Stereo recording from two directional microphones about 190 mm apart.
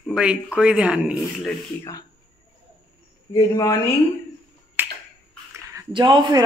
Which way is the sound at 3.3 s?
20° left (ahead or behind).